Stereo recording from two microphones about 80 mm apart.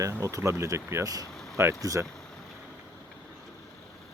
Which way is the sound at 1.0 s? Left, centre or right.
Right.